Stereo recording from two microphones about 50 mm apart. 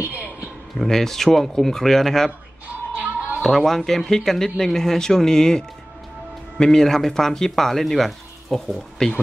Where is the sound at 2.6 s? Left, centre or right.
Right.